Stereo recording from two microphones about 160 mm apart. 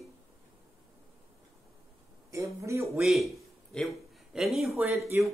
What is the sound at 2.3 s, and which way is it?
Speech, 20° right (ahead or behind).